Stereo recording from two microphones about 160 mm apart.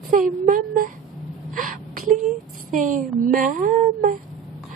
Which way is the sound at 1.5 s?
60° right (ahead or behind).